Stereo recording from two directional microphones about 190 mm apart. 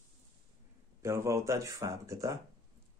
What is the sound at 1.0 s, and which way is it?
Speech, 15° right (ahead or behind).